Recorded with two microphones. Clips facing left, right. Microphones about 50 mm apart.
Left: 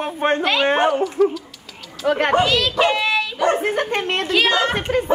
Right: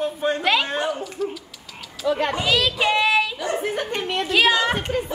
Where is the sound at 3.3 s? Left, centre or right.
Left.